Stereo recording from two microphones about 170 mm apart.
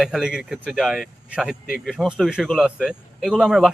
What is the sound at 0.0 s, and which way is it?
Speech, 5° right (ahead or behind).